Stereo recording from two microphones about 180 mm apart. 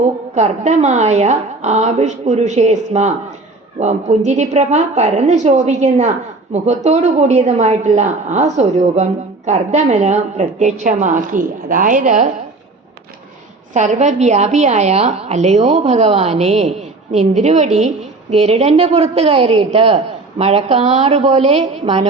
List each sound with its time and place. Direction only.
0.3 s a woman's voice: 40° right (ahead or behind)
13.7 s a woman's voice: 40° right (ahead or behind)